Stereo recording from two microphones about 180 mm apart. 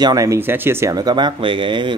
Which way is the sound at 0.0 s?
20° right (ahead or behind).